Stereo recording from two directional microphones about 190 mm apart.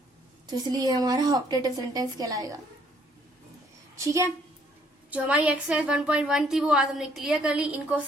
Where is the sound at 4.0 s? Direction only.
15° right (ahead or behind).